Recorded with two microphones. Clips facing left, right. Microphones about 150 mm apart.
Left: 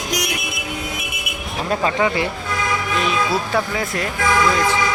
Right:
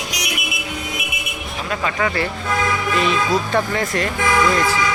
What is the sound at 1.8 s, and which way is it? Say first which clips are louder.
Speech: left 1 dB; 20° left (ahead or behind).